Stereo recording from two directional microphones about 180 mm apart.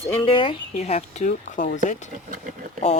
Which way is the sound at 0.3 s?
30° left (ahead or behind).